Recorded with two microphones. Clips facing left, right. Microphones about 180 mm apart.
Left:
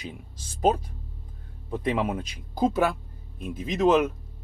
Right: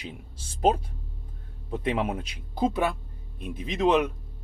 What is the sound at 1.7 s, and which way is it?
Speech, 5° right (ahead or behind).